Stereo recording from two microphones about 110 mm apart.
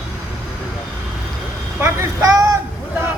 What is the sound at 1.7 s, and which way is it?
Vehicle, 25° right (ahead or behind).